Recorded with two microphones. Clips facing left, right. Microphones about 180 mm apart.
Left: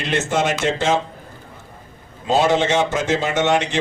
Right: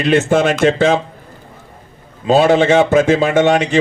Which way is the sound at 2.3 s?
60° right (ahead or behind).